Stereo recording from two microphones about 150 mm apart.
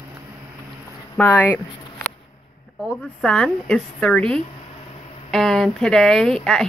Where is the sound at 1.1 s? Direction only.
10° left (ahead or behind).